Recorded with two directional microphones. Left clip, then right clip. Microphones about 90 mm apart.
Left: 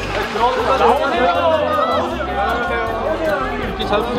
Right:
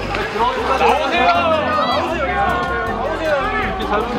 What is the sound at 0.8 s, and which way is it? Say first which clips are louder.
Music: right 2 dB; 30° right (ahead or behind).